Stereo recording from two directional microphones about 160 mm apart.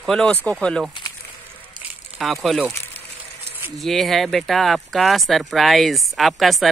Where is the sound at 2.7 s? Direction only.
15° left (ahead or behind).